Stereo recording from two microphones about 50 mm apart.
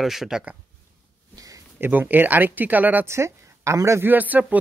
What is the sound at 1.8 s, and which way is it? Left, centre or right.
Speech, right.